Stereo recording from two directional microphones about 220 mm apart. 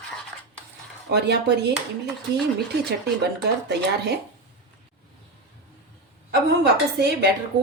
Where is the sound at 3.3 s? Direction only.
50° right (ahead or behind).